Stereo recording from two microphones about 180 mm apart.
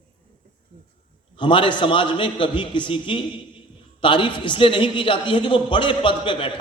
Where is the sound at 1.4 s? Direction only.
25° left (ahead or behind).